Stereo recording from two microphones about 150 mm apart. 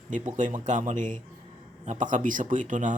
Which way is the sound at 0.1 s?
55° right (ahead or behind).